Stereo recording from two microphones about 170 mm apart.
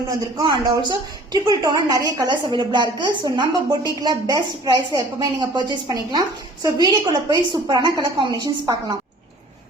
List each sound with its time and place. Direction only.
0.1 s a woman's voice: 25° right (ahead or behind)